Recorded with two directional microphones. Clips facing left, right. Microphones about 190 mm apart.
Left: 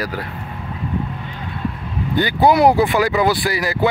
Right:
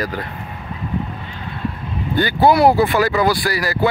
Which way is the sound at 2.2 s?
20° left (ahead or behind).